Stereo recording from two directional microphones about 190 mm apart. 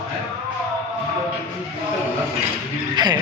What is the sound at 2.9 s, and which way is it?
Speech, 20° right (ahead or behind).